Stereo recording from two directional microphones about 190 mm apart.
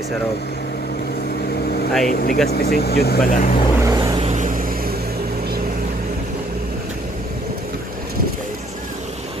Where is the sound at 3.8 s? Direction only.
20° right (ahead or behind).